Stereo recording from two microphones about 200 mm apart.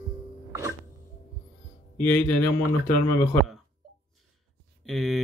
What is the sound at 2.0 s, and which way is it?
Speech, 10° left (ahead or behind).